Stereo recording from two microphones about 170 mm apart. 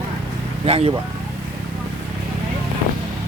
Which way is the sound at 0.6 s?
35° right (ahead or behind).